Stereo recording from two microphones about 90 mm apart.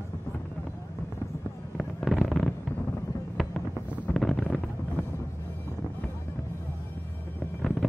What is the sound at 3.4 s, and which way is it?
Music, centre (ahead or behind).